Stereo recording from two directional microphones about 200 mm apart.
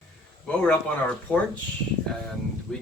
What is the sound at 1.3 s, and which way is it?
Speech, 10° left (ahead or behind).